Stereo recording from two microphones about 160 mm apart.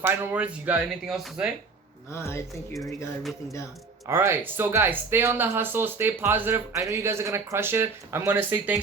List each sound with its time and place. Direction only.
0.0 s speech: 10° right (ahead or behind)
2.1 s speech: 15° left (ahead or behind)
4.0 s speech: 15° right (ahead or behind)